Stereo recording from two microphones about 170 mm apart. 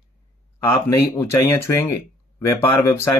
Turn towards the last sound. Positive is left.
turn(degrees=15)  # may be behind; listen again after turning